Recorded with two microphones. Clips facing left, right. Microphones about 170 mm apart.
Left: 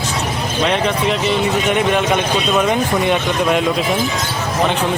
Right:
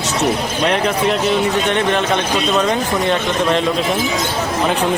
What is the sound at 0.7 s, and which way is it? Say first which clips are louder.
Speech: right 2 dB; centre (ahead or behind).